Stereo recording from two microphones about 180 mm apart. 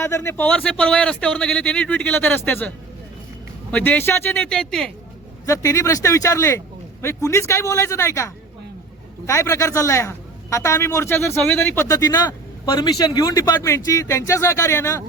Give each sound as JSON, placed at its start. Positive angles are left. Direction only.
{"t": 0.0, "sound": "a man's voice", "side_deg": 15}
{"t": 5.5, "sound": "a man's voice", "side_deg": 15}